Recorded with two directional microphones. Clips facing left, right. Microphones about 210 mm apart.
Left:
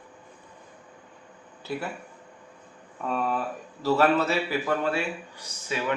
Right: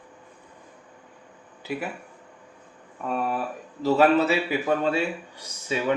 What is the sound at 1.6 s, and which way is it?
Speech, 15° right (ahead or behind).